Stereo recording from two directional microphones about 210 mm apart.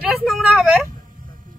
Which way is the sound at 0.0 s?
Centre (ahead or behind).